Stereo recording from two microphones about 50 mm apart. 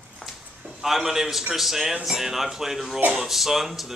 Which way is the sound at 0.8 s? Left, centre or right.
Centre.